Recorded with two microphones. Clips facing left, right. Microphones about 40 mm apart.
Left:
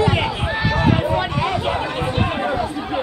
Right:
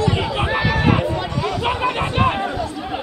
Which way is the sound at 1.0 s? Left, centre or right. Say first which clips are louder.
Left 2 dB; left.